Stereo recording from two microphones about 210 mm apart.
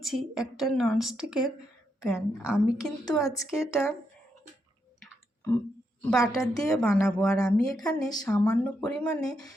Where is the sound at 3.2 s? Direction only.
15° left (ahead or behind).